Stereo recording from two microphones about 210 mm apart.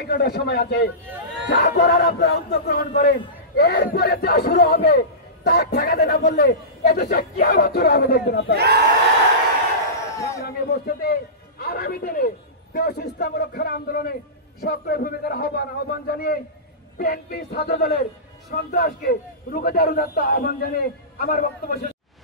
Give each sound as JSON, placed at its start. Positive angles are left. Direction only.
{"t": 0.1, "sound": "a man's voice", "side_deg": 50}
{"t": 8.5, "sound": "a sound", "side_deg": -50}
{"t": 10.0, "sound": "a sound", "side_deg": 15}
{"t": 10.4, "sound": "a man's voice", "side_deg": 50}
{"t": 17.6, "sound": "a man's voice", "side_deg": 30}
{"t": 18.5, "sound": "a man's voice", "side_deg": 45}